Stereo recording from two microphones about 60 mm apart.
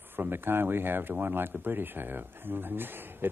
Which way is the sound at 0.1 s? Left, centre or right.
Right.